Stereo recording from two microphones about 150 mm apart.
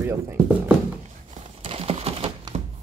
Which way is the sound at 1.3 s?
45° right (ahead or behind).